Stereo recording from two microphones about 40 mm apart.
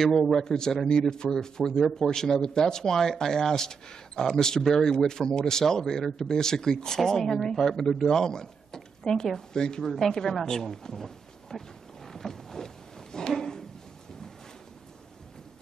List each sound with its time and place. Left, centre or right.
0.0 s speech: centre
11.5 s roaring cats: centre
12.1 s a sound: centre